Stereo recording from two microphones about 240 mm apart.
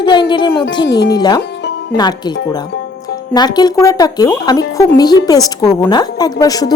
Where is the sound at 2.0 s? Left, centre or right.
Centre.